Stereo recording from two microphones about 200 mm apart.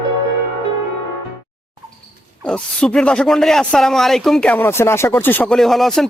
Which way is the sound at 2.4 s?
5° left (ahead or behind).